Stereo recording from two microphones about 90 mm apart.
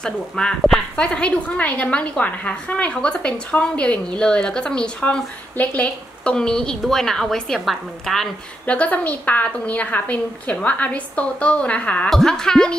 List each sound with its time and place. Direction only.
0.0 s a woman's voice: 10° left (ahead or behind)
8.6 s speech: 15° left (ahead or behind)